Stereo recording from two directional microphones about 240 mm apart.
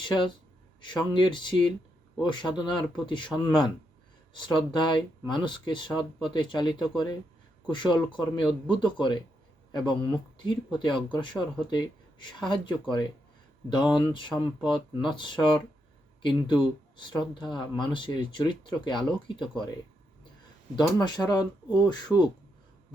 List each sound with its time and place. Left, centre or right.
0.0 s speech: centre
17.0 s speech: centre
20.7 s speech: centre